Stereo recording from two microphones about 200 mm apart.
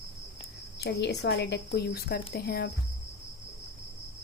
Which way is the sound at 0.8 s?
55° left (ahead or behind).